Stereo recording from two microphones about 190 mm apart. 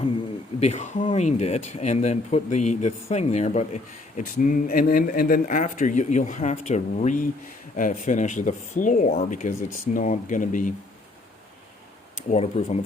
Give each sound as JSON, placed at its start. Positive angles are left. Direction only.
{"t": 0.6, "sound": "speech", "side_deg": 40}
{"t": 12.3, "sound": "speech", "side_deg": 35}